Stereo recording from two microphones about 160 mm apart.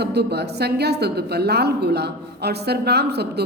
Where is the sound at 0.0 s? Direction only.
90° right.